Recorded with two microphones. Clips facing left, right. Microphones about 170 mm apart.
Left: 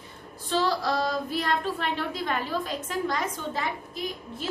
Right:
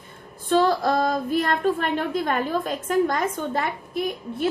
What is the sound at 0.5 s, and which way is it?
A woman's voice, 50° right (ahead or behind).